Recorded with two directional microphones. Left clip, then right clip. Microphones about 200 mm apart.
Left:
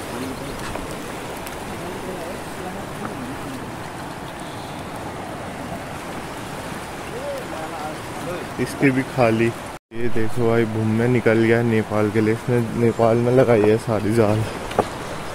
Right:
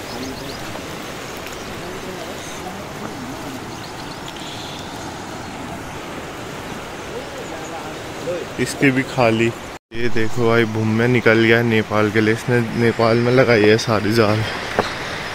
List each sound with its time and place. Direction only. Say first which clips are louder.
8.5 s speech: right 2 dB; 10° right (ahead or behind)
13.0 s speech: right 1 dB; 25° right (ahead or behind)